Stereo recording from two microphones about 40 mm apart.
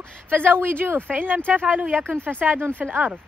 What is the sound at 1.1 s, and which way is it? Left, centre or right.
Speech, right.